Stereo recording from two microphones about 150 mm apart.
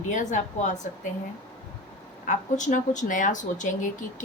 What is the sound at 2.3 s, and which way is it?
Speech, 55° left (ahead or behind).